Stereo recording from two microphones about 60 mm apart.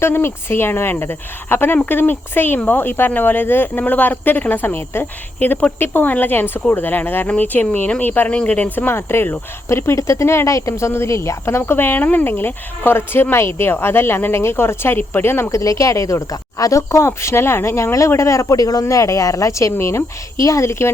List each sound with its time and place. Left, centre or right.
0.0 s speech: left
9.0 s cricket: left
12.0 s speech: left
15.4 s speech: left
19.7 s cricket: left